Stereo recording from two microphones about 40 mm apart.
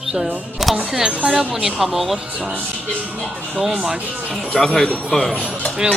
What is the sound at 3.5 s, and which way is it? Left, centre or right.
Speech, centre.